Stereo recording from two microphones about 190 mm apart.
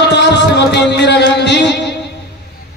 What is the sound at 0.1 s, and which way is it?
Music, 65° left (ahead or behind).